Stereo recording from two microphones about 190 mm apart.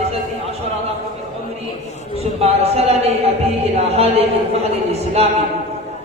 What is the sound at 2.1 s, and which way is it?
Speech, 35° right (ahead or behind).